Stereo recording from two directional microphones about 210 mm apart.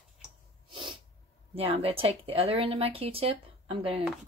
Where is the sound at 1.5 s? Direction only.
30° right (ahead or behind).